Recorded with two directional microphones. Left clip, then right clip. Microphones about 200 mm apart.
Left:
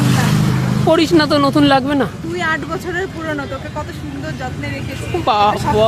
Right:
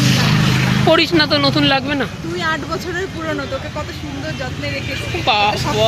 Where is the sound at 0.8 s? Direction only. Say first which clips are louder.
Left 1 dB; 20° left (ahead or behind).